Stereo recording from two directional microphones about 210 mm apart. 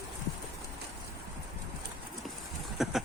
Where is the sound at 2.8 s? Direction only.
Centre (ahead or behind).